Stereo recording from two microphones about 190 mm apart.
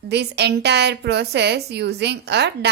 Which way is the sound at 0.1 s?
60° right (ahead or behind).